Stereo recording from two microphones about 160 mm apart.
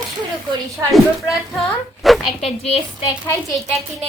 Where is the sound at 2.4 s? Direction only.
40° left (ahead or behind).